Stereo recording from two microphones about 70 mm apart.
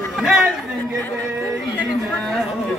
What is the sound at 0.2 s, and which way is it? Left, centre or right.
Chatter, centre.